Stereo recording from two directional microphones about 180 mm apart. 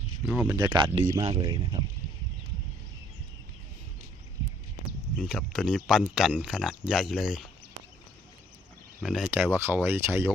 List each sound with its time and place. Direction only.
0.3 s speech: 5° right (ahead or behind)
0.6 s speech: 25° right (ahead or behind)
5.1 s speech: centre (ahead or behind)
9.0 s speech: centre (ahead or behind)
9.4 s speech: 15° right (ahead or behind)